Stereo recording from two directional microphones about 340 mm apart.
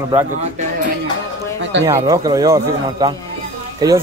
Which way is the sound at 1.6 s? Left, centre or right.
Right.